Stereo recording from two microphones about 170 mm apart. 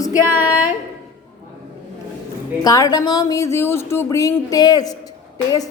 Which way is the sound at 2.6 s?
20° left (ahead or behind).